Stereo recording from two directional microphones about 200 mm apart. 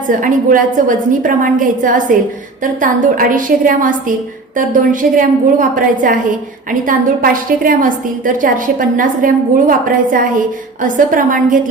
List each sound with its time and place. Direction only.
0.2 s a woman's voice: 40° right (ahead or behind)